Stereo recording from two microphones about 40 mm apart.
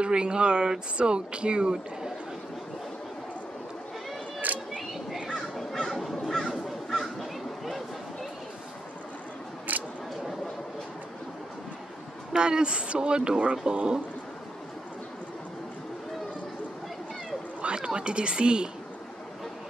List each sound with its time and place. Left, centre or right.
0.0 s speech: right
4.5 s single-lens reflex camera: right
4.9 s a sound: centre
5.6 s crow: centre
9.7 s single-lens reflex camera: right
12.4 s speech: right
17.7 s speech: right